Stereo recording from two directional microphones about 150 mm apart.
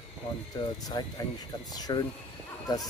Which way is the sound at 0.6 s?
30° left (ahead or behind).